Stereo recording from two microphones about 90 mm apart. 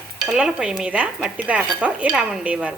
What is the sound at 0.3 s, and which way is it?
Dishes, 10° right (ahead or behind).